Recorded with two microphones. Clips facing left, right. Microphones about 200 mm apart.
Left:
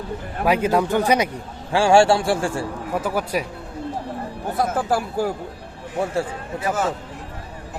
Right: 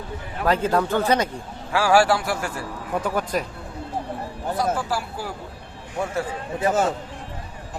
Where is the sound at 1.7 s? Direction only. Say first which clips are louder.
Left 3 dB; 25° left (ahead or behind).